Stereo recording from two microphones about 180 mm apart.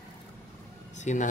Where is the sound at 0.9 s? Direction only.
40° left (ahead or behind).